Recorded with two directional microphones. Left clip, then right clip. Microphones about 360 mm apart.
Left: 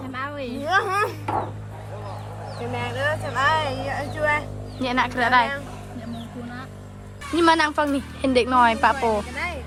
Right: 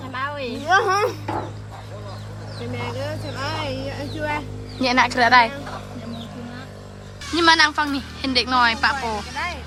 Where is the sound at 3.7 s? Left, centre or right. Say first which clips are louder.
Left 2 dB; left.